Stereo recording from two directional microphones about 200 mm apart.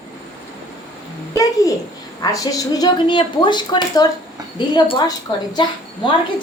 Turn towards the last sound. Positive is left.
turn(degrees=20)  # may be behind; listen again after turning